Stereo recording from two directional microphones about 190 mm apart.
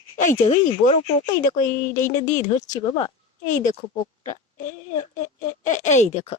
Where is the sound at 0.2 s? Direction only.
40° left (ahead or behind).